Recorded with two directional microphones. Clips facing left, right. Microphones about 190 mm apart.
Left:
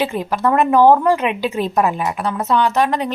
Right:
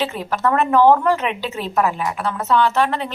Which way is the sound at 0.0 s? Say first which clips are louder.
Left 2 dB; 15° left (ahead or behind).